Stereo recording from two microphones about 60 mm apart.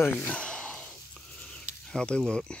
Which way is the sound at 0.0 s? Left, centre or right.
Left.